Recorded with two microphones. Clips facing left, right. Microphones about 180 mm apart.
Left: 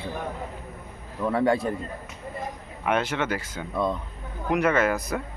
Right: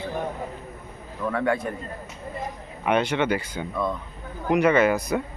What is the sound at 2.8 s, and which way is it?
Speech, centre (ahead or behind).